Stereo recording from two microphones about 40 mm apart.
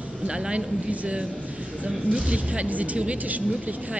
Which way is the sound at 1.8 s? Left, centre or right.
Right.